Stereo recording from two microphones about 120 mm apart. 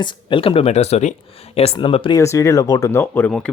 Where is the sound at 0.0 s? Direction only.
40° left (ahead or behind); by 1.1 s 65° left (ahead or behind).